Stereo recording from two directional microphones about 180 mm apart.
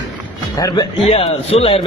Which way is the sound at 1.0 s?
35° left (ahead or behind).